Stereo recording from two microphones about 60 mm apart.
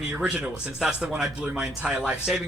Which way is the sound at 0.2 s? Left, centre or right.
Centre.